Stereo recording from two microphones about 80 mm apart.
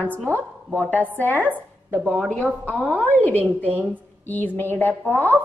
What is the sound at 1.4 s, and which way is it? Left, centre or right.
Speech, right.